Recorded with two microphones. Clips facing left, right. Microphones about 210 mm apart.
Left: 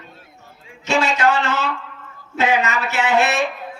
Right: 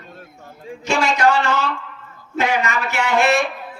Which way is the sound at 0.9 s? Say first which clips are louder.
Right 1 dB; 15° right (ahead or behind).